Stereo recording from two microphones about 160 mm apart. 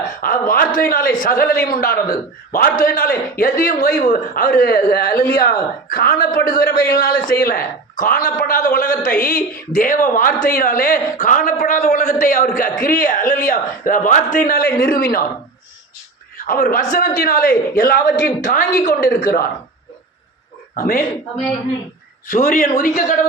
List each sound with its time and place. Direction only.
0.2 s a man's voice: 65° left (ahead or behind)
16.5 s a man's voice: 60° left (ahead or behind)
20.7 s a man's voice: 60° left (ahead or behind)
22.3 s a man's voice: 55° left (ahead or behind)